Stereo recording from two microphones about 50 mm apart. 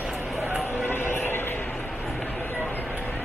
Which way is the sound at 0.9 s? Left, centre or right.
Left.